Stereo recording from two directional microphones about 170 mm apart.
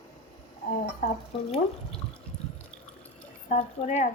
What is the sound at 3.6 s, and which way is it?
Speech, 40° left (ahead or behind).